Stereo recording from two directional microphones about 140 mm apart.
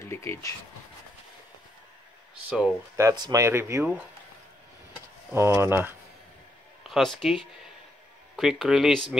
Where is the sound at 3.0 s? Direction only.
25° right (ahead or behind).